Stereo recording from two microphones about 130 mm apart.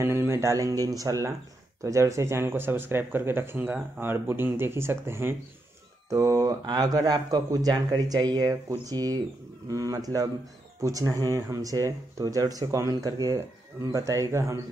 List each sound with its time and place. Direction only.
0.0 s speech: 20° right (ahead or behind)